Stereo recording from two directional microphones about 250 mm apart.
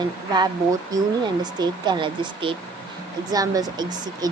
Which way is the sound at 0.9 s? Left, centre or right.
Centre.